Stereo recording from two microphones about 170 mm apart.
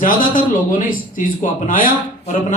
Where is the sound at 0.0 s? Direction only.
50° left (ahead or behind).